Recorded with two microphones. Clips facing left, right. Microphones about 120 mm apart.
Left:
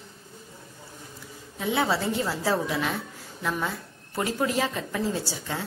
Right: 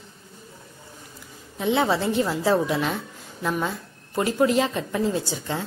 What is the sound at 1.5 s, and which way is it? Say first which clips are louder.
A woman's voice: right 4 dB; 20° right (ahead or behind).